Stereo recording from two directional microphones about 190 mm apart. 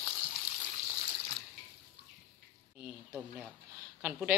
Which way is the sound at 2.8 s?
5° right (ahead or behind).